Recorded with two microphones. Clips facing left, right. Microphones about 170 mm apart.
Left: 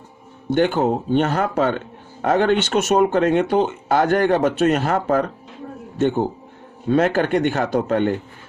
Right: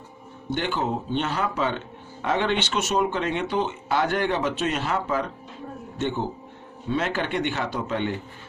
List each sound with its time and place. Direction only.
0.5 s speech: 50° left (ahead or behind)